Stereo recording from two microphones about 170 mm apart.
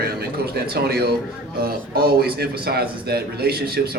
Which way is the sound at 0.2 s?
65° right (ahead or behind).